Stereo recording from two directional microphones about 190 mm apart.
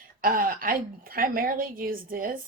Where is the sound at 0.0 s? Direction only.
50° right (ahead or behind).